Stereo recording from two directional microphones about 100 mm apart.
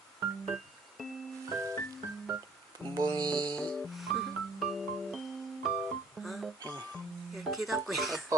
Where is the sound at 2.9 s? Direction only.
45° right (ahead or behind).